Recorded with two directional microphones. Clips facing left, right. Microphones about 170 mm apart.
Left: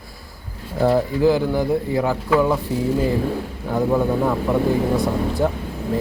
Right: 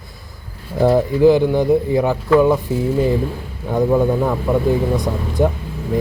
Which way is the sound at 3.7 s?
10° right (ahead or behind).